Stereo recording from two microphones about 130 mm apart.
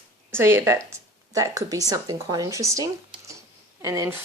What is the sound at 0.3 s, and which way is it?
Speech, 20° right (ahead or behind).